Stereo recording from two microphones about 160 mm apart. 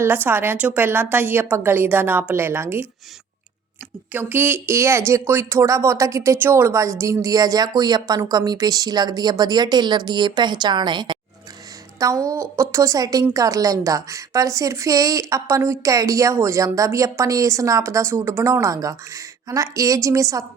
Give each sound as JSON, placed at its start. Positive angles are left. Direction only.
{"t": 0.0, "sound": "a woman's voice", "side_deg": -15}
{"t": 4.1, "sound": "a woman's voice", "side_deg": -10}